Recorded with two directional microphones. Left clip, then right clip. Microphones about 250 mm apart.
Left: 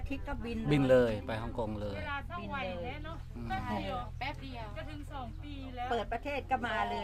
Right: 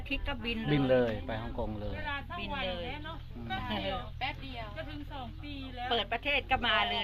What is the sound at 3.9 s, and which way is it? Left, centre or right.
Speech, left.